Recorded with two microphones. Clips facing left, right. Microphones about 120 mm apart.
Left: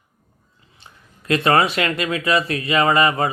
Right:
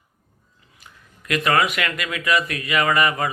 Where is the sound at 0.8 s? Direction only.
30° left (ahead or behind).